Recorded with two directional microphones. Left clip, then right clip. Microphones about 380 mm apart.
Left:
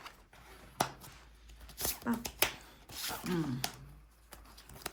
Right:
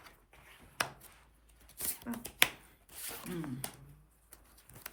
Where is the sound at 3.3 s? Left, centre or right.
Left.